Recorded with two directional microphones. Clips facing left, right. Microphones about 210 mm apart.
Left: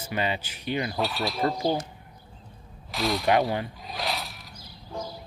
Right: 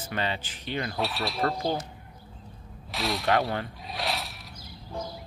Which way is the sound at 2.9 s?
Centre (ahead or behind).